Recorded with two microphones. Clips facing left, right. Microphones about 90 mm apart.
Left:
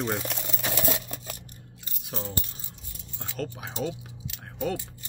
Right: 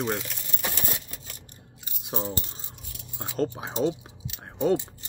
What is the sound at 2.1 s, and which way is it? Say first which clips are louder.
Speech: right 3 dB; 20° right (ahead or behind).